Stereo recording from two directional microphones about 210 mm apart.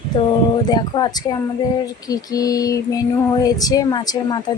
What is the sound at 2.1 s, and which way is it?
Female singing, 15° left (ahead or behind).